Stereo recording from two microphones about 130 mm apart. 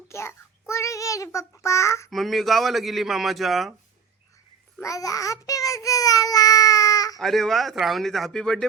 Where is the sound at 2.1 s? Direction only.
Centre (ahead or behind).